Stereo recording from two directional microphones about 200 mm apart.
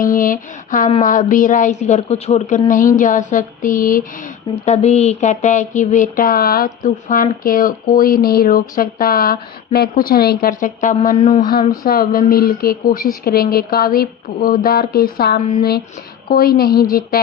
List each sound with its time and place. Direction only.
0.0 s a woman's voice: 45° left (ahead or behind)
4.6 s speech: 35° left (ahead or behind); by 16.8 s 50° left (ahead or behind)